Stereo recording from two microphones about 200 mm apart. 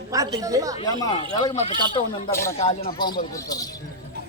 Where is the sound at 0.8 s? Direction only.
20° left (ahead or behind).